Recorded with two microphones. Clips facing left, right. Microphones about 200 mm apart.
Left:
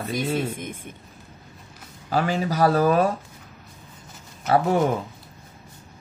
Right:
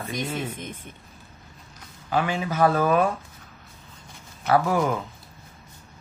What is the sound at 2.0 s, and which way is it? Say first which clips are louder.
Speech: left 2 dB; 40° left (ahead or behind).